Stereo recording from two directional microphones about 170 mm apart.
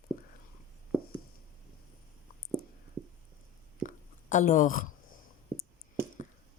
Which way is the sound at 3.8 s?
50° left (ahead or behind).